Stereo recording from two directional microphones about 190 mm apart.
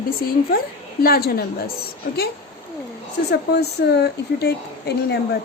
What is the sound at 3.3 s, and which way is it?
Speech, 60° left (ahead or behind).